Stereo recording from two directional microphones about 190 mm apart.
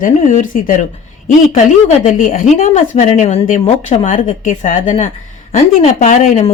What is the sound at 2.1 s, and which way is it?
Speech, 40° left (ahead or behind).